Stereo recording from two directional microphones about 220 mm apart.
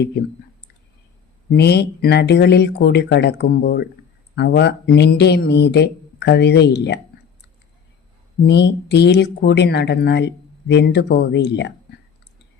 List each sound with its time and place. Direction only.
1.5 s speech: 50° left (ahead or behind)
8.4 s speech: 50° left (ahead or behind)